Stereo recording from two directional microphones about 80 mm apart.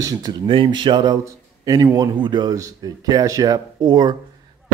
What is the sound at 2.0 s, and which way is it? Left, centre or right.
Speech, right.